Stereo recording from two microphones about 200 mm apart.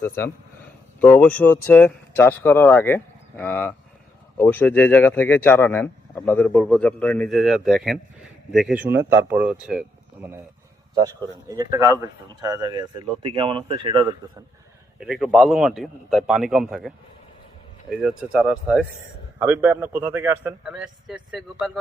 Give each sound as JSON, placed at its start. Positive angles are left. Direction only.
{"t": 0.2, "sound": "a man's voice", "side_deg": 10}
{"t": 11.2, "sound": "speech", "side_deg": -20}
{"t": 14.9, "sound": "a man's voice", "side_deg": 0}
{"t": 18.0, "sound": "a man's voice", "side_deg": -5}